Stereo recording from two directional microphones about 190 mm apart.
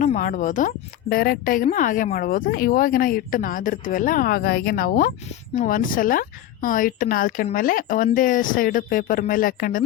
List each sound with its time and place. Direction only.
0.0 s a woman's voice: 40° left (ahead or behind)